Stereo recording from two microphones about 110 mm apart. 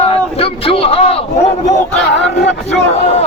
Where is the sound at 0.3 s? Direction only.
60° left (ahead or behind).